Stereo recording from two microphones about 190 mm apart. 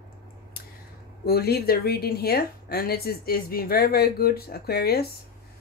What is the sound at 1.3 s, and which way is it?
Speech, 55° left (ahead or behind).